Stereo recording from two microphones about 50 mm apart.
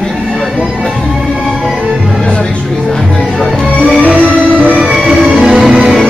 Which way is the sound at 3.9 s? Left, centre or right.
Right.